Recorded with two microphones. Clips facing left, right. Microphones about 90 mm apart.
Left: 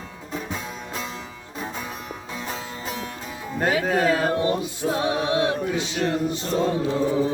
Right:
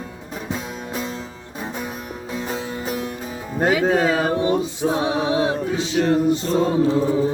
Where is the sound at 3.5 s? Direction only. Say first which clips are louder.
Right 4 dB; 25° right (ahead or behind).